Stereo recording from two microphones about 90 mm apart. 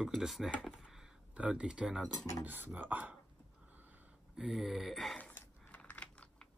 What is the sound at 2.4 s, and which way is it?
Speech, 20° right (ahead or behind).